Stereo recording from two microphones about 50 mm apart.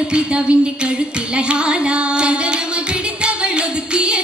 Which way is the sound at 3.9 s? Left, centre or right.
Right.